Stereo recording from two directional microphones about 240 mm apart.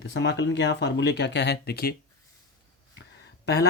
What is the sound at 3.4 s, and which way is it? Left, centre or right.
Speech, left.